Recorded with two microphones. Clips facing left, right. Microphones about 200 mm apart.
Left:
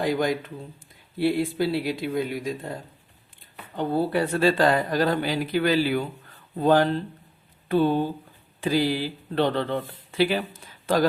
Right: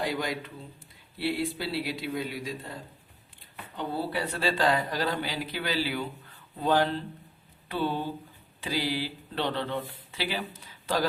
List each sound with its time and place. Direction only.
0.0 s speech: 50° left (ahead or behind)
3.8 s speech: 50° left (ahead or behind)